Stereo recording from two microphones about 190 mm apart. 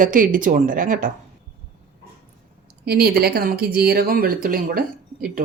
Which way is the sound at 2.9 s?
55° right (ahead or behind).